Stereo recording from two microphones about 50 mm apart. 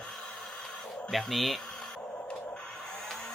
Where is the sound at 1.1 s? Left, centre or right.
Centre.